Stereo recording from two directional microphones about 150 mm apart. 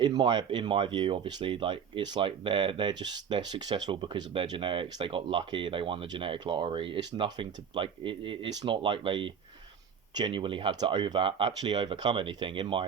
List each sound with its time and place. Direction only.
0.0 s speech: 30° right (ahead or behind)